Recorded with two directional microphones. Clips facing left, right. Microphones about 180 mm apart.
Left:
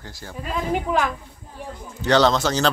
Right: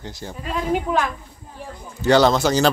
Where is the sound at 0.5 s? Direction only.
Centre (ahead or behind).